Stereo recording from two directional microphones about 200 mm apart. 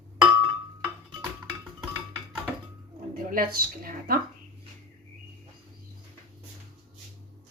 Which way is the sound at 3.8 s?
50° right (ahead or behind).